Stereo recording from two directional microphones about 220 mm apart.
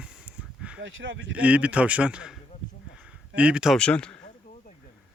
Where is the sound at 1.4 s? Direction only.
5° right (ahead or behind).